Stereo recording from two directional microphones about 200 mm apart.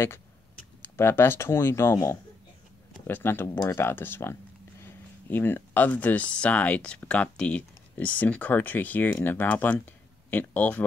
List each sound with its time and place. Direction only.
0.8 s speech: 10° left (ahead or behind)